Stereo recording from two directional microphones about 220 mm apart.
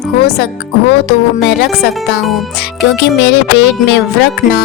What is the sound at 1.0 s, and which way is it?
Music, 50° left (ahead or behind).